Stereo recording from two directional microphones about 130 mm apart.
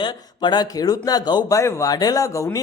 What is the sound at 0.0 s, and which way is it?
A man's voice, 35° left (ahead or behind).